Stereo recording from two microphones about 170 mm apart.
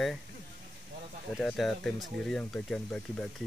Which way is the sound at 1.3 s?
Centre (ahead or behind).